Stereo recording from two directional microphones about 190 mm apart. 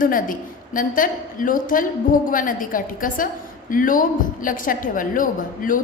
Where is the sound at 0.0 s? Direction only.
45° left (ahead or behind).